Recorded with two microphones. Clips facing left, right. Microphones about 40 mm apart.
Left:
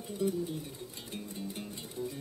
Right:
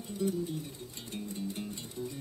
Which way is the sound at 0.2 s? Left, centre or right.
Centre.